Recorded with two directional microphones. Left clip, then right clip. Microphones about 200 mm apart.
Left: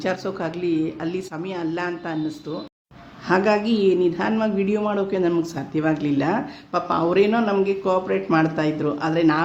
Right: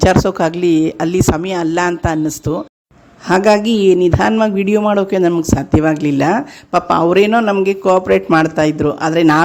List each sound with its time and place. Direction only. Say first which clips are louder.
0.0 s speech: right 13 dB; 50° right (ahead or behind)